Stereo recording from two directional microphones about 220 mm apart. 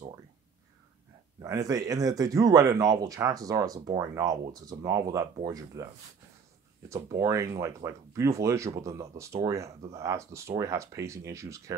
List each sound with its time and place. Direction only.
1.4 s speech: 15° right (ahead or behind)
7.2 s speech: 15° right (ahead or behind)